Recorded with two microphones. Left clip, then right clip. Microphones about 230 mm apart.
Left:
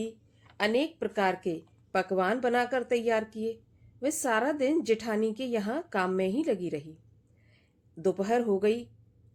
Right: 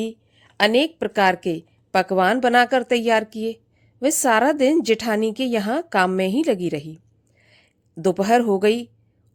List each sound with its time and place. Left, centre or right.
0.0 s a woman's voice: right